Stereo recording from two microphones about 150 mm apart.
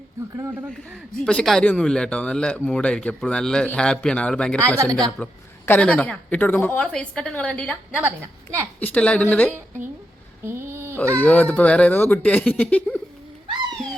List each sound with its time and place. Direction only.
1.2 s speech: 5° left (ahead or behind)
4.8 s a woman's voice: 25° right (ahead or behind)
5.1 s speech: 10° left (ahead or behind)
10.4 s a sound: 15° right (ahead or behind)
11.1 s speech: 10° left (ahead or behind)